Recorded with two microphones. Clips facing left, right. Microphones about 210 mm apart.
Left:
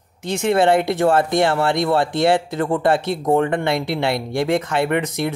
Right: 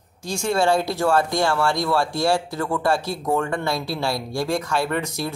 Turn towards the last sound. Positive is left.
turn(degrees=20)  # may be behind; listen again after turning